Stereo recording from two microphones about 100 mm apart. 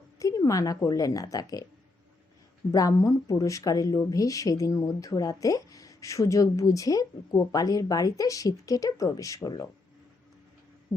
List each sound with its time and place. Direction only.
0.2 s a sound: 35° left (ahead or behind)
0.9 s speech: 35° left (ahead or behind)
2.7 s speech: 35° left (ahead or behind)